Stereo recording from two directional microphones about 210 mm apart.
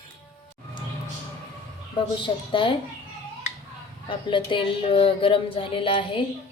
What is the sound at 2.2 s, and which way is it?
Speech, 25° left (ahead or behind).